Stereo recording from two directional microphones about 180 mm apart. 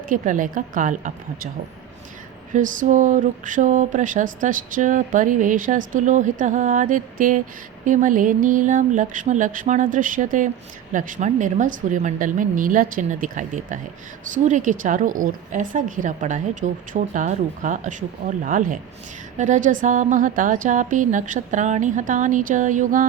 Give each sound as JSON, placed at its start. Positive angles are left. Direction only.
{"t": 0.1, "sound": "speech", "side_deg": -45}
{"t": 2.5, "sound": "speech", "side_deg": -45}